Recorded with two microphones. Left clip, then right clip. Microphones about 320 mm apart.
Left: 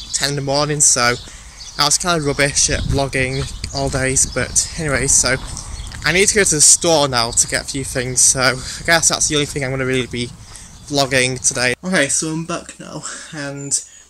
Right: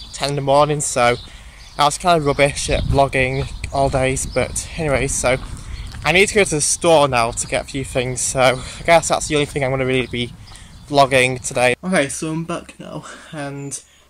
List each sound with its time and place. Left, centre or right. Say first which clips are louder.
0.1 s speech: right 3 dB; centre